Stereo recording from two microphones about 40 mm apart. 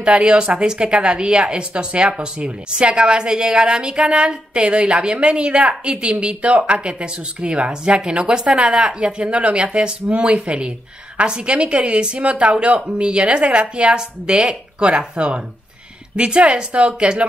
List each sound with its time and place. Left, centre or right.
0.0 s a woman's voice: right